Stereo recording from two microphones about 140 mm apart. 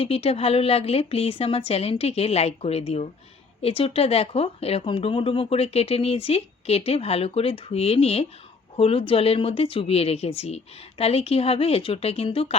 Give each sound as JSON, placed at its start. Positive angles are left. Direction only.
{"t": 0.0, "sound": "speech", "side_deg": 45}